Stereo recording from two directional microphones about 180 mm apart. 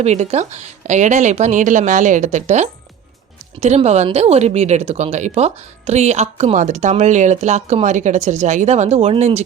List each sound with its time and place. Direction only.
0.0 s speech: 40° right (ahead or behind)